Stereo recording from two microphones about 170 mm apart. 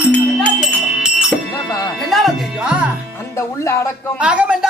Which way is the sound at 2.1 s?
Centre (ahead or behind).